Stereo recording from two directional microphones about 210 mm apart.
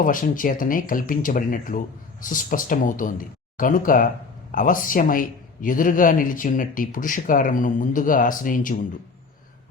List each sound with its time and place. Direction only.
0.0 s speech: 40° left (ahead or behind)